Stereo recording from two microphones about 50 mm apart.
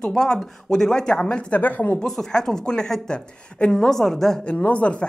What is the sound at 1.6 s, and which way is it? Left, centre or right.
Speech, left.